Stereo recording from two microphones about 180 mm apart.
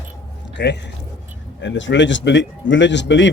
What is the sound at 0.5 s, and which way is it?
Speech, 75° left (ahead or behind).